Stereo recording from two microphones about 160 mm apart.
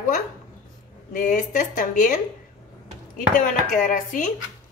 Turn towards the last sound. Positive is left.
turn(degrees=55)  # may be behind; listen again after turning